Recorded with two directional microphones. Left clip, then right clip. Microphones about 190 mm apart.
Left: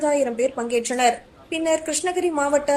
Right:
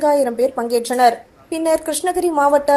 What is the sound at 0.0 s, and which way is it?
A woman's voice, 20° right (ahead or behind).